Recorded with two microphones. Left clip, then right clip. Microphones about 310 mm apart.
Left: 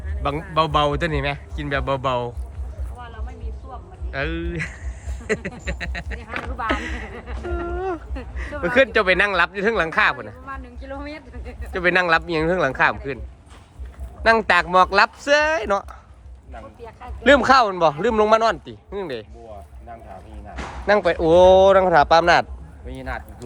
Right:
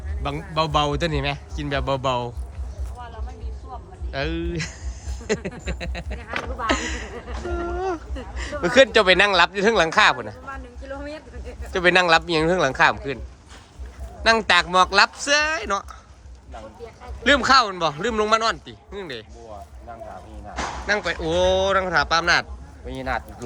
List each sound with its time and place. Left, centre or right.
0.2 s a man's voice: centre
4.1 s a man's voice: centre
6.7 s a sound: centre
8.4 s speech: centre
10.4 s a sound: left
11.7 s a man's voice: centre
14.2 s a man's voice: centre
17.2 s speech: centre
20.8 s speech: centre
22.9 s speech: centre